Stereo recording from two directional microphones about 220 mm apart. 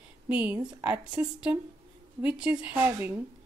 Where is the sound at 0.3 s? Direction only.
5° right (ahead or behind).